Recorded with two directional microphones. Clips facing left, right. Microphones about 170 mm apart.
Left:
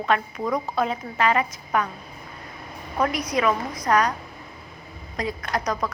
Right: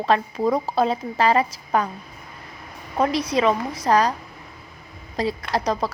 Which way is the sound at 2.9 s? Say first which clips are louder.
Right 3 dB; 30° right (ahead or behind).